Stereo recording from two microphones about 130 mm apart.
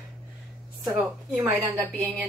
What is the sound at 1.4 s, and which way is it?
Speech, 15° right (ahead or behind).